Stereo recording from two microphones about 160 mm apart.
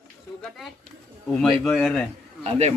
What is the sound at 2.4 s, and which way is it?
Speech, 40° right (ahead or behind).